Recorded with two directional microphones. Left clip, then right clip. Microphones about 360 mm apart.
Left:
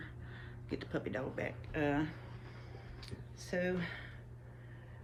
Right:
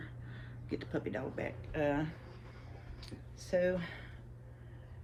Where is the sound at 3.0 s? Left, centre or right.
Centre.